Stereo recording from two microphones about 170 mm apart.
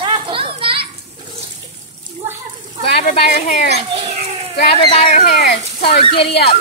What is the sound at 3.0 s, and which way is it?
Speech, 50° left (ahead or behind).